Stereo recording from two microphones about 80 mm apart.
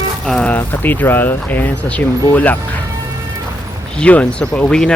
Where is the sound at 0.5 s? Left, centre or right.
Left.